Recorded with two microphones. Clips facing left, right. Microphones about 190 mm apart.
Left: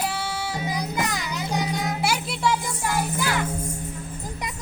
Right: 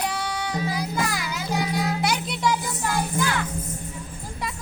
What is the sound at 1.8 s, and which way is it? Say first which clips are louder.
Music: right 1 dB; 5° left (ahead or behind).